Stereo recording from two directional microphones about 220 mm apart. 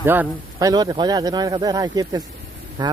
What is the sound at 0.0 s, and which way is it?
Speech, 10° right (ahead or behind).